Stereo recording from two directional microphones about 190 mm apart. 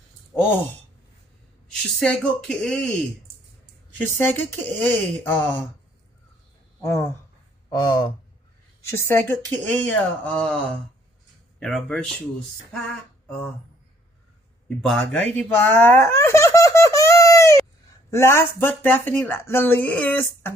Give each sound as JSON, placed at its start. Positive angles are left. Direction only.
{"t": 1.8, "sound": "speech", "side_deg": 5}
{"t": 3.9, "sound": "speech", "side_deg": 10}
{"t": 6.8, "sound": "speech", "side_deg": 15}
{"t": 8.9, "sound": "speech", "side_deg": 10}
{"t": 11.6, "sound": "speech", "side_deg": 5}
{"t": 12.9, "sound": "a sound", "side_deg": 10}
{"t": 14.8, "sound": "speech", "side_deg": 5}